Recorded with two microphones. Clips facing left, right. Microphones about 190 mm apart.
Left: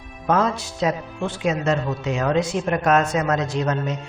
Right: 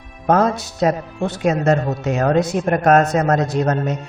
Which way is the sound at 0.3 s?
45° right (ahead or behind).